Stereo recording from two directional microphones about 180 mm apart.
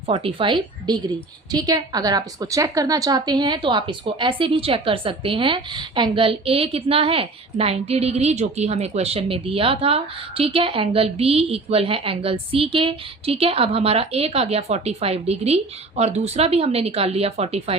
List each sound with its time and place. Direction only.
0.1 s a woman's voice: 30° right (ahead or behind)